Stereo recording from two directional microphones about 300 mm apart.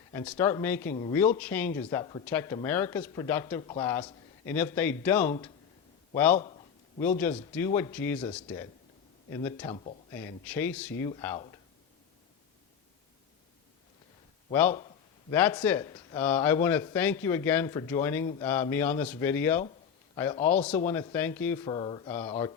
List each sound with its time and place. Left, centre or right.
0.1 s speech: centre
7.5 s speech: centre
9.6 s speech: centre
10.2 s speech: centre
14.5 s speech: centre